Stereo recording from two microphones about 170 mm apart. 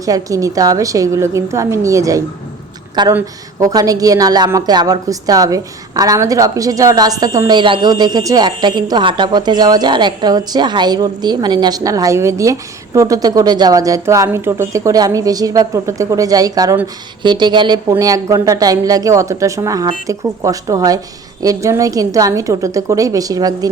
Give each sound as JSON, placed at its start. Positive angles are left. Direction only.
{"t": 0.0, "sound": "speech", "side_deg": -20}